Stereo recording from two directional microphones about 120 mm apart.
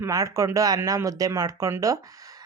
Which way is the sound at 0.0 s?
30° right (ahead or behind).